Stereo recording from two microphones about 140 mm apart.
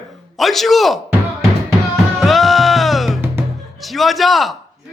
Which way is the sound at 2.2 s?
Centre (ahead or behind).